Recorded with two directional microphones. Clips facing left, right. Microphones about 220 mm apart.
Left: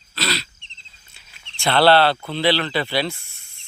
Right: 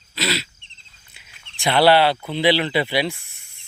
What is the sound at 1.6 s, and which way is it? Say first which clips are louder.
Speech: even; 15° right (ahead or behind).